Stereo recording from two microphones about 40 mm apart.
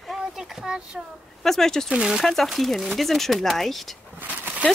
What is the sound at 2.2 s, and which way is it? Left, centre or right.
Speech, centre.